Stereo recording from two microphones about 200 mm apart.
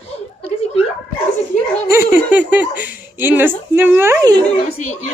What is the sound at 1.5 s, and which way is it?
Dog, 40° left (ahead or behind).